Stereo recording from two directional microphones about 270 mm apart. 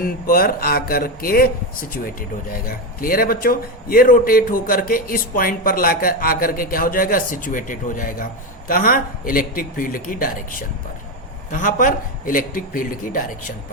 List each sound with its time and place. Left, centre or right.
0.0 s a man's voice: left